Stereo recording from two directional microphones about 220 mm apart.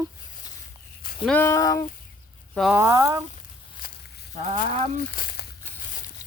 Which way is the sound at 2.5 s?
Centre (ahead or behind).